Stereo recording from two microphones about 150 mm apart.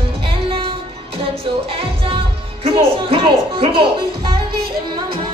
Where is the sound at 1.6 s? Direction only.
40° right (ahead or behind).